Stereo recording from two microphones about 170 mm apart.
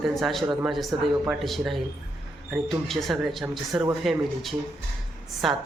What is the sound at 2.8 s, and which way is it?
Speech, centre (ahead or behind).